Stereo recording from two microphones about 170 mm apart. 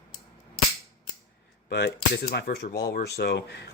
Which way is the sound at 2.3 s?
70° left (ahead or behind).